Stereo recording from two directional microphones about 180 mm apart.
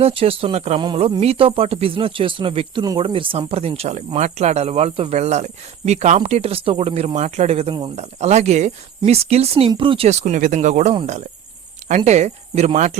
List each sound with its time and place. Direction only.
0.0 s speech: 30° right (ahead or behind)